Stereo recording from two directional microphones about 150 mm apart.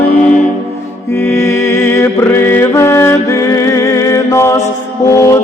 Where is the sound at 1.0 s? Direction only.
15° left (ahead or behind).